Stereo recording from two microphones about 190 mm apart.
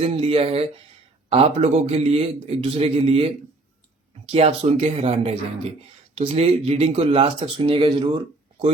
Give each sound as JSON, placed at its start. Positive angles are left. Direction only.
{"t": 0.0, "sound": "speech", "side_deg": -30}